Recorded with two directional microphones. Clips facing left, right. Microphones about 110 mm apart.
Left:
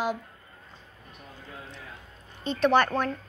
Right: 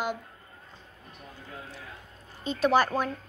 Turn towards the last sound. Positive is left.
turn(degrees=-5)  # may be behind; listen again after turning